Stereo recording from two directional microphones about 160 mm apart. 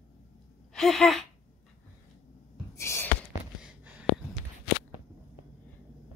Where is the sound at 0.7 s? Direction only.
Centre (ahead or behind).